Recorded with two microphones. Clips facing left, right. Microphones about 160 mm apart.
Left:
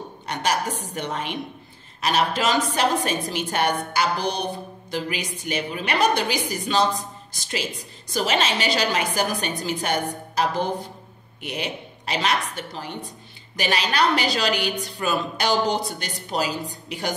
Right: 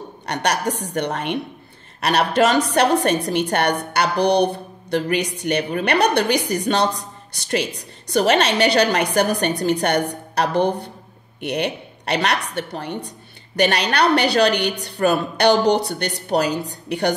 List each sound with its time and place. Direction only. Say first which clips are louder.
0.3 s a woman's voice: right 3 dB; 70° right (ahead or behind)